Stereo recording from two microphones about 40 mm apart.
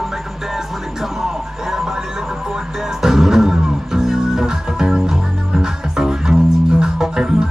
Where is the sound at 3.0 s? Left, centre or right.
Centre.